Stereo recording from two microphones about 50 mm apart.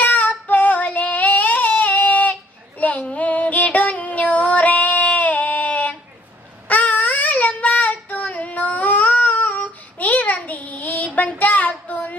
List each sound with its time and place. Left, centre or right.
0.0 s child singing: left
2.7 s female singing: left
6.7 s child singing: left